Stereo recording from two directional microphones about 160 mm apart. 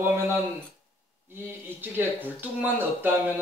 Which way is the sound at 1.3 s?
15° right (ahead or behind).